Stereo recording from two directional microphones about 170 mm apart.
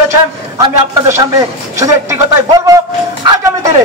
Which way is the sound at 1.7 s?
15° right (ahead or behind).